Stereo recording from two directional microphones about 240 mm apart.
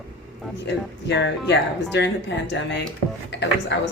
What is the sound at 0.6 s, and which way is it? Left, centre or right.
A woman's voice, left.